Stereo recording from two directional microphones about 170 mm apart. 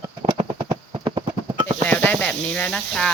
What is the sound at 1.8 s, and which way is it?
Sizzle, 10° left (ahead or behind).